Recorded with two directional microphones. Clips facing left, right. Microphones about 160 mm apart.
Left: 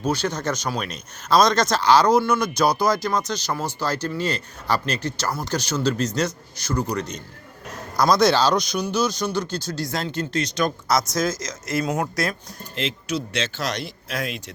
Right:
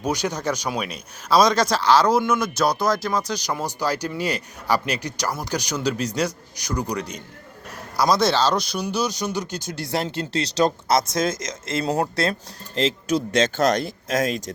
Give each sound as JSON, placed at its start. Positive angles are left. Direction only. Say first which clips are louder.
{"t": 0.0, "sound": "speech", "louder": "even", "side_deg": -15}
{"t": 9.8, "sound": "speech", "louder": "right 4 dB", "side_deg": -25}